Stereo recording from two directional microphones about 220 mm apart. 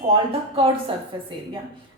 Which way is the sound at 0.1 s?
25° right (ahead or behind).